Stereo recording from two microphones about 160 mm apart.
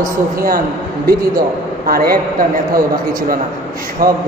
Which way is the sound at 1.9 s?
65° right (ahead or behind).